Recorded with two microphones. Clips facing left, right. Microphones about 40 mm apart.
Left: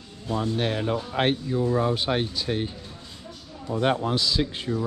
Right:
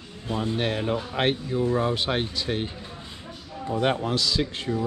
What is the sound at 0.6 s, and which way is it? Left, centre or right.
Speech, right.